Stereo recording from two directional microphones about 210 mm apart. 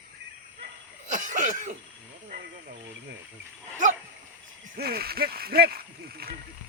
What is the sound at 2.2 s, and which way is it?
Snake, 40° right (ahead or behind).